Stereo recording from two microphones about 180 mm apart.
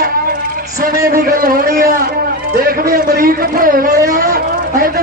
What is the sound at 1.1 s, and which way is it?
A man's voice, 55° right (ahead or behind).